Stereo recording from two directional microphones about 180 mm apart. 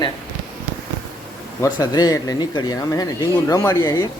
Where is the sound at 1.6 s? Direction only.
20° left (ahead or behind).